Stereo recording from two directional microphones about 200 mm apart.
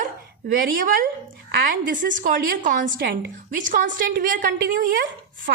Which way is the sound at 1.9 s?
40° right (ahead or behind).